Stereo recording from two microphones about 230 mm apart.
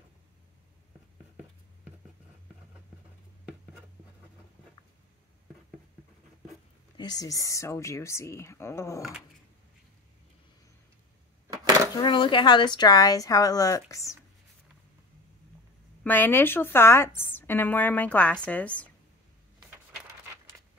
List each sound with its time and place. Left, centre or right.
7.0 s a woman's voice: centre
11.9 s a woman's voice: centre
16.0 s a woman's voice: centre